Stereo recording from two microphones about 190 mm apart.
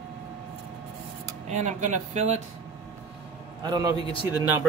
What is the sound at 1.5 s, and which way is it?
Speech, 40° right (ahead or behind).